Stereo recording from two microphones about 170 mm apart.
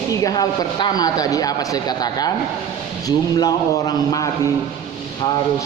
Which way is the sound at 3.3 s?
20° left (ahead or behind).